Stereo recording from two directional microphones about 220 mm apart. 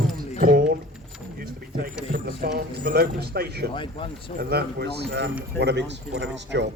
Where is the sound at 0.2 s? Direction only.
40° right (ahead or behind).